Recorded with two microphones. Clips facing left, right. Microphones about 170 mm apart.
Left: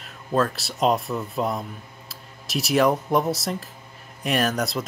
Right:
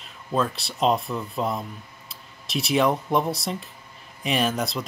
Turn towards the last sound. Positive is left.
turn(degrees=0)  # may be behind; listen again after turning